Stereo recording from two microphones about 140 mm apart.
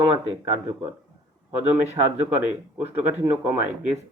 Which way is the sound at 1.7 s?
15° right (ahead or behind).